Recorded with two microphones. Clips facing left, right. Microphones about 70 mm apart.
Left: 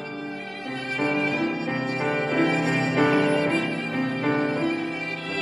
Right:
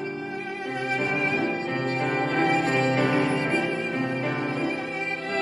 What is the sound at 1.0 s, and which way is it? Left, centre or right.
Violin, right.